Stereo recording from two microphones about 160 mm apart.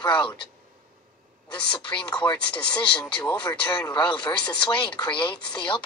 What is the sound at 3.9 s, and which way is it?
Speech, 30° left (ahead or behind).